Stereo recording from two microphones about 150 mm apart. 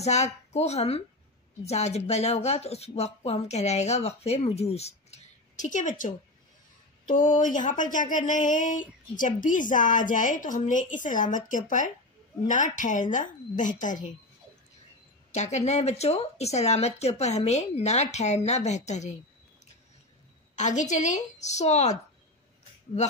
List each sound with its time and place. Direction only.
0.0 s speech: 50° left (ahead or behind)
15.3 s speech: 50° left (ahead or behind)
20.5 s speech: 50° left (ahead or behind)